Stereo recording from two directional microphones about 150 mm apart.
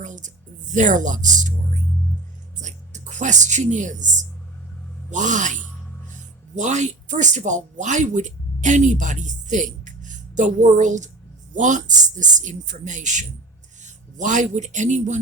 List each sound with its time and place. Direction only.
0.0 s a sound: 55° right (ahead or behind)
0.7 s speech: 55° right (ahead or behind)
2.6 s speech: 55° right (ahead or behind)